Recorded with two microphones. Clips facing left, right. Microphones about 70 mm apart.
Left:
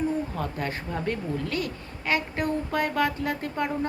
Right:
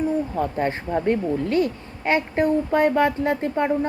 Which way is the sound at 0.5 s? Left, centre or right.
Right.